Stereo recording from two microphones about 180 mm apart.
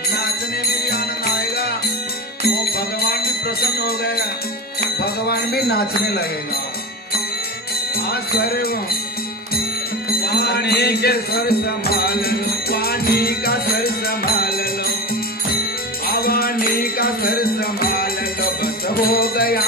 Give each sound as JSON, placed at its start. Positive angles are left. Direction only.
{"t": 0.1, "sound": "music", "side_deg": 60}
{"t": 7.9, "sound": "music", "side_deg": 60}
{"t": 10.0, "sound": "music", "side_deg": 60}
{"t": 16.1, "sound": "music", "side_deg": 55}